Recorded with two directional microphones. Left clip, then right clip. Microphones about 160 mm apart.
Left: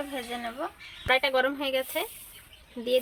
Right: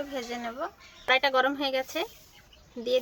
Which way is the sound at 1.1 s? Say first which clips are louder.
Right 1 dB; 30° right (ahead or behind).